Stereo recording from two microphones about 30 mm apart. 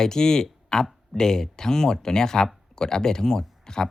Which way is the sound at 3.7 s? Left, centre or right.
Left.